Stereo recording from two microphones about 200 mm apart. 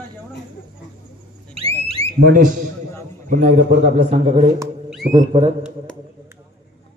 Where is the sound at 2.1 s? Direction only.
45° right (ahead or behind).